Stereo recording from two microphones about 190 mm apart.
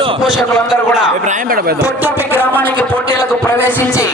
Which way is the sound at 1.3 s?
45° right (ahead or behind).